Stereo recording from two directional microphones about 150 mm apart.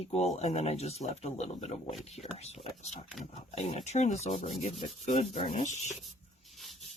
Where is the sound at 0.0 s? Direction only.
45° left (ahead or behind).